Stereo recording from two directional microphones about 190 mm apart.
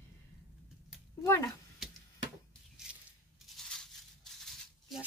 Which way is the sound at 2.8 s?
5° right (ahead or behind).